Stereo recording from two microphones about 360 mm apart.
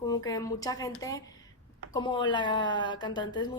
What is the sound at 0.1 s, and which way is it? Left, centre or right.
A woman's voice, centre.